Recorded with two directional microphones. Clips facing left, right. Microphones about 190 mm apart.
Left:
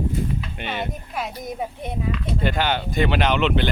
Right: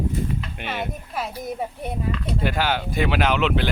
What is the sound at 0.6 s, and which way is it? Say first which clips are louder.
Speech: left 1 dB; centre (ahead or behind).